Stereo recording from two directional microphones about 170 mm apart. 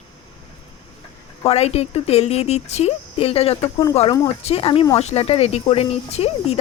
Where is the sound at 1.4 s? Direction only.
35° left (ahead or behind).